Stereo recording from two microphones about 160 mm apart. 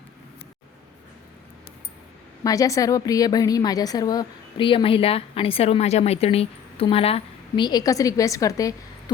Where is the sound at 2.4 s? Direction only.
20° left (ahead or behind).